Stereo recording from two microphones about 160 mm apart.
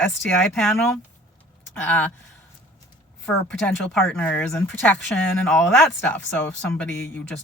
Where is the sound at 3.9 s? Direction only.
5° left (ahead or behind).